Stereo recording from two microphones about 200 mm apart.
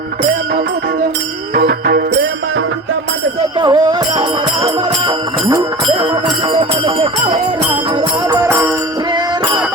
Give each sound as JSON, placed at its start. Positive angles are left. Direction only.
{"t": 1.5, "sound": "music", "side_deg": -50}
{"t": 3.6, "sound": "music", "side_deg": -20}
{"t": 8.3, "sound": "music", "side_deg": -15}